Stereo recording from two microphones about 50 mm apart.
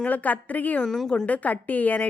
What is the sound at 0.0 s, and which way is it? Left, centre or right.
A woman's voice, left.